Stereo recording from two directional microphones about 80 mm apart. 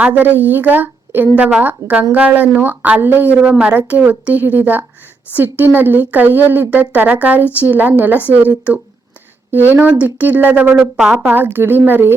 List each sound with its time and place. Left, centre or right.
0.0 s a woman's voice: centre
11.2 s a woman's voice: right